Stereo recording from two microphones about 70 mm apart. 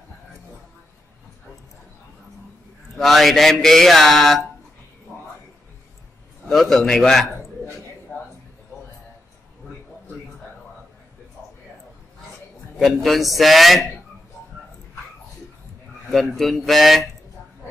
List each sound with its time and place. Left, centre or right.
3.0 s a man's voice: centre
6.5 s a man's voice: centre
8.1 s a sound: centre
12.7 s a man's voice: centre
16.1 s a man's voice: centre